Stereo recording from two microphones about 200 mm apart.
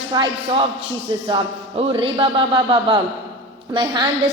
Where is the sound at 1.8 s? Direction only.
25° right (ahead or behind).